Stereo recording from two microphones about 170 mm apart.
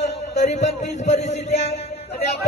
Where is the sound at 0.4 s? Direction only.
40° left (ahead or behind).